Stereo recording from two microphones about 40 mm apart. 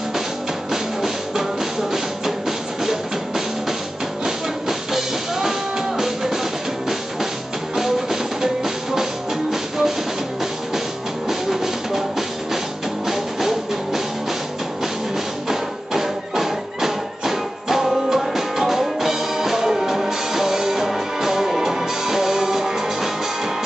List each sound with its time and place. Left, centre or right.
0.7 s music: centre
7.7 s music: centre
11.2 s music: centre
15.4 s music: centre